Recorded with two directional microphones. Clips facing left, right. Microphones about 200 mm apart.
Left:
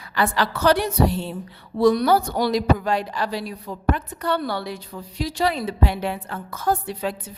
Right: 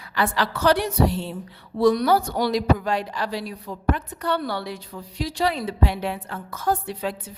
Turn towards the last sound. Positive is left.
turn(degrees=40)  # may be behind; listen again after turning